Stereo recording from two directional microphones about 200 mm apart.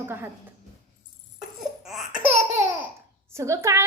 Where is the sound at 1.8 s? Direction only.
Centre (ahead or behind).